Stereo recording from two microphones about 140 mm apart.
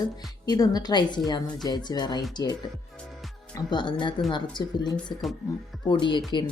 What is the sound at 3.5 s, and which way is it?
Speech, 35° left (ahead or behind).